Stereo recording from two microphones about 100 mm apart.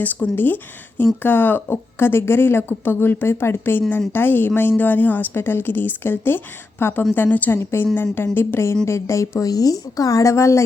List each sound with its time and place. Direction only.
0.0 s a woman's voice: 15° left (ahead or behind)